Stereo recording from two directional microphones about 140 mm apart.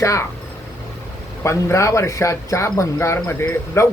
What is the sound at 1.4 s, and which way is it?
Speech, 20° left (ahead or behind).